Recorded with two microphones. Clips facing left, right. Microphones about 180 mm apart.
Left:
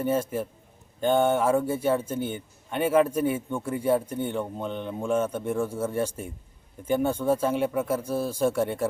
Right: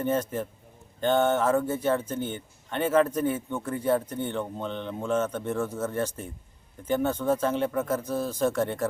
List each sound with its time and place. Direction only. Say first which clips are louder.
0.0 s a man's voice: left 1 dB; 10° left (ahead or behind)